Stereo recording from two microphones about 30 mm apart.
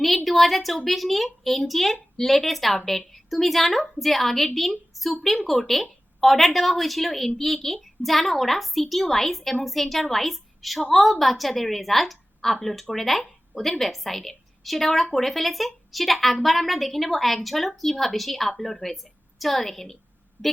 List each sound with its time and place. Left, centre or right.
0.3 s a woman's voice: centre
20.4 s speech: right